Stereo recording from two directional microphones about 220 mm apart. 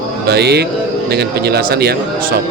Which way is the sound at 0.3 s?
50° right (ahead or behind).